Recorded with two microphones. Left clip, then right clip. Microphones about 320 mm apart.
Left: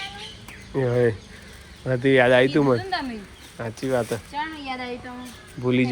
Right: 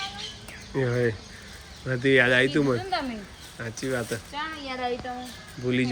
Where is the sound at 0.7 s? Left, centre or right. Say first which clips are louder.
Left 5 dB; centre.